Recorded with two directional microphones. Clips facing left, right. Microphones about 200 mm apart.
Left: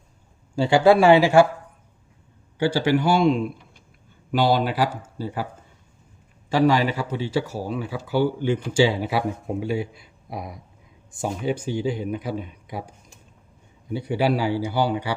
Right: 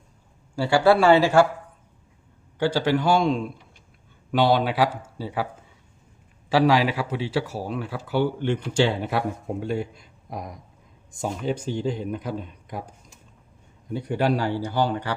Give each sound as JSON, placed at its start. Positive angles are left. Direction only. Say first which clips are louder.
{"t": 0.5, "sound": "speech", "louder": "left 2 dB", "side_deg": 20}
{"t": 2.6, "sound": "speech", "louder": "left 2 dB", "side_deg": 10}
{"t": 6.5, "sound": "speech", "louder": "even", "side_deg": -5}
{"t": 13.8, "sound": "speech", "louder": "left 1 dB", "side_deg": 5}